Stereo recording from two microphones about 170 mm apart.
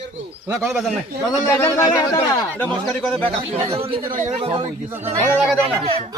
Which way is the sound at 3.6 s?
35° right (ahead or behind).